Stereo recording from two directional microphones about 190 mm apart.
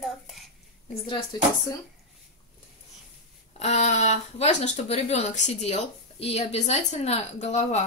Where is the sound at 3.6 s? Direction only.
35° left (ahead or behind).